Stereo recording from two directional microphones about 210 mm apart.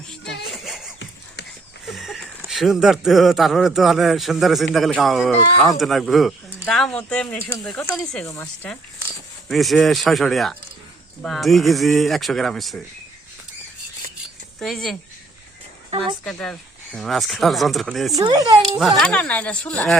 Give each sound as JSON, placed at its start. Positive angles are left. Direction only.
{"t": 0.5, "sound": "a sound", "side_deg": 0}
{"t": 2.5, "sound": "a man's voice", "side_deg": 0}
{"t": 14.6, "sound": "a man's voice", "side_deg": 0}
{"t": 16.2, "sound": "a man's voice", "side_deg": 5}
{"t": 18.2, "sound": "speech", "side_deg": -20}
{"t": 18.8, "sound": "a man's voice", "side_deg": 0}